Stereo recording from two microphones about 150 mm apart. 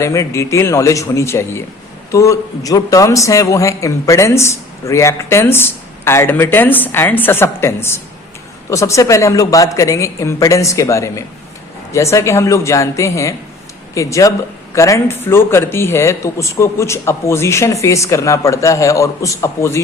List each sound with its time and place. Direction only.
0.0 s a woman's voice: 20° left (ahead or behind)